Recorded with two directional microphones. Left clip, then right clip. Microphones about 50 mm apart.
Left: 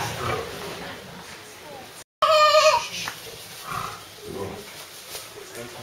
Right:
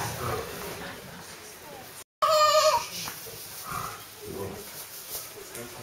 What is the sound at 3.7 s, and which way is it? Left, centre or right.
Dog, centre.